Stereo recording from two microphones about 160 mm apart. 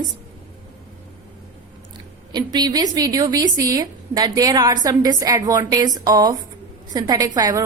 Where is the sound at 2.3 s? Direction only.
25° right (ahead or behind).